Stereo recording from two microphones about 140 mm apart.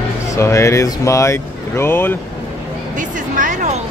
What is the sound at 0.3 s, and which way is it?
Speech, 20° left (ahead or behind).